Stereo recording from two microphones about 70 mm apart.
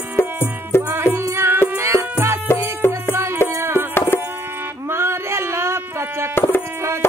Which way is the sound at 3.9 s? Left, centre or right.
Left.